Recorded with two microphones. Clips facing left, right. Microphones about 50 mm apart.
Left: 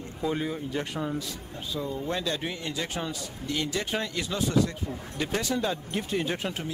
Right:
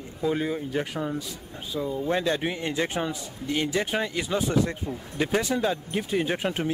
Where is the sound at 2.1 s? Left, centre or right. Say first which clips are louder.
Right 5 dB; right; by 6.2 s centre.